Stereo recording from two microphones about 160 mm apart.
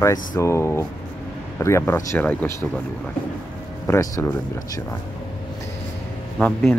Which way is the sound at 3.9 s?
20° left (ahead or behind).